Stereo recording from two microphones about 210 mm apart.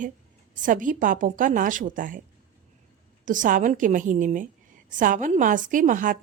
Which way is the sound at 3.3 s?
40° right (ahead or behind).